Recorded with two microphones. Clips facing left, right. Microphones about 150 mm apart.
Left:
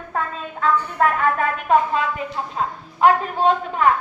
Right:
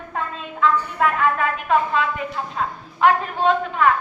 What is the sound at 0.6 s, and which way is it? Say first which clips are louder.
A woman's voice: even; 45° left (ahead or behind).